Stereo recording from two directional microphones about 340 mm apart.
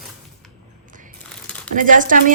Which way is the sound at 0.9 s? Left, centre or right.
Right.